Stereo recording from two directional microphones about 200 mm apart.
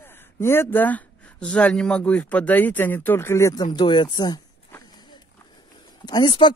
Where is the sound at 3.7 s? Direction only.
25° left (ahead or behind).